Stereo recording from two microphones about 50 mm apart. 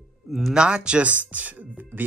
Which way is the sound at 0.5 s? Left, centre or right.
Centre.